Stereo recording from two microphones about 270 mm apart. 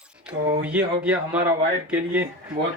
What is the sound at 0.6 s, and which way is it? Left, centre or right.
Speech, centre.